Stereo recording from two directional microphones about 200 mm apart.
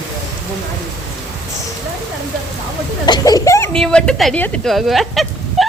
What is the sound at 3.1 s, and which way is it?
Speech, 20° left (ahead or behind).